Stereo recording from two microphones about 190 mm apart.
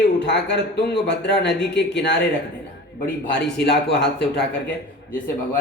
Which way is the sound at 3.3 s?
60° left (ahead or behind).